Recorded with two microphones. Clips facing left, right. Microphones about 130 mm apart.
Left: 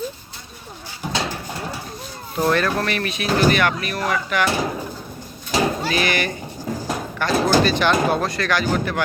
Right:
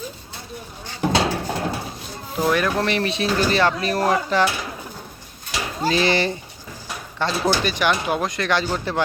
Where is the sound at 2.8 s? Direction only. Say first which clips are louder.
Right 2 dB; 25° right (ahead or behind).